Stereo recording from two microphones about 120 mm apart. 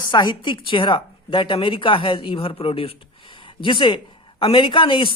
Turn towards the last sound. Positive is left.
turn(degrees=45)  # may be behind; listen again after turning